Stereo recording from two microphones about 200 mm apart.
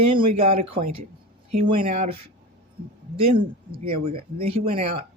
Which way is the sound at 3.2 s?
30° right (ahead or behind).